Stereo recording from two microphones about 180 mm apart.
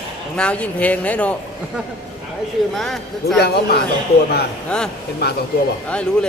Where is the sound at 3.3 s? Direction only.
65° left (ahead or behind).